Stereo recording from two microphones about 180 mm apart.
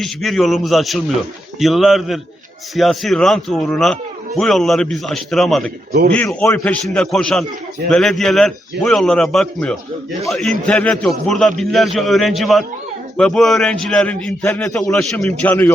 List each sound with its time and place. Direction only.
0.0 s a man's voice: centre (ahead or behind)
6.2 s a man's voice: 15° left (ahead or behind)
6.8 s a man's voice: centre (ahead or behind)